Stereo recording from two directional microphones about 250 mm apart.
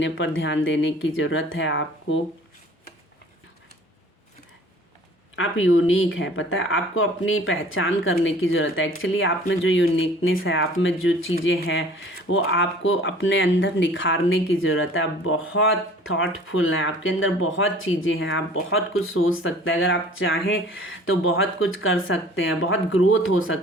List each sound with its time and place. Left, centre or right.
0.0 s speech: left
5.4 s speech: left